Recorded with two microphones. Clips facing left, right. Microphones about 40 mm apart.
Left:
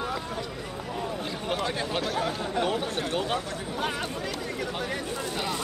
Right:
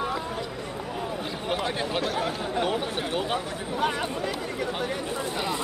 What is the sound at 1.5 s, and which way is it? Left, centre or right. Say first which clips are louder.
Speech: right 1 dB; centre.